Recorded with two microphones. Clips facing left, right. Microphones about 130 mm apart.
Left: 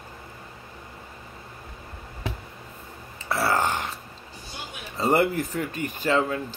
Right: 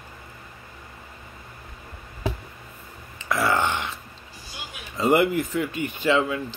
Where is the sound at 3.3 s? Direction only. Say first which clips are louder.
Right 1 dB; 40° left (ahead or behind).